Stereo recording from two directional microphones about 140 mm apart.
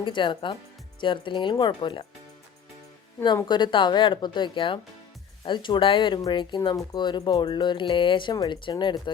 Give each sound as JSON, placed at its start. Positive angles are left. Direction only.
{"t": 0.0, "sound": "speech", "side_deg": 35}
{"t": 3.5, "sound": "speech", "side_deg": 35}